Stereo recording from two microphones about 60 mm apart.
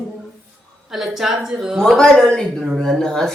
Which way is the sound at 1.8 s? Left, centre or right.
Centre.